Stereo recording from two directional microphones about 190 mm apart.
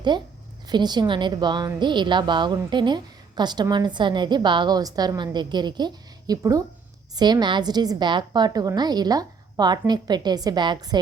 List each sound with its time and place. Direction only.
0.1 s a woman's voice: 25° right (ahead or behind)